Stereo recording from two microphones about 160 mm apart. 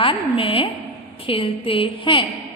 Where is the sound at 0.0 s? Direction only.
35° left (ahead or behind).